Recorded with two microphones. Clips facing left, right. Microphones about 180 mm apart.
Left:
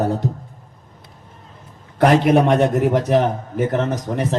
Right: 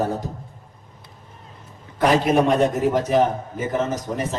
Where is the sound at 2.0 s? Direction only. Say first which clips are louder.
Left 3 dB; 65° left (ahead or behind).